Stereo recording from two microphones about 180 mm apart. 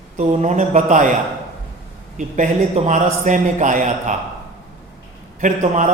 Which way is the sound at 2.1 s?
40° right (ahead or behind).